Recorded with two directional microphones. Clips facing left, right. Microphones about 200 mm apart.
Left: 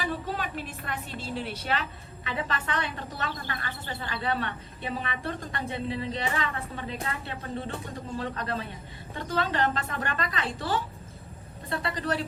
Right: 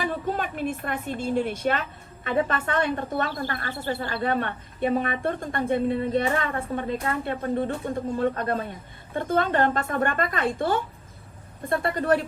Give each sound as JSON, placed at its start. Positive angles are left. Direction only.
{"t": 0.0, "sound": "a woman's voice", "side_deg": -50}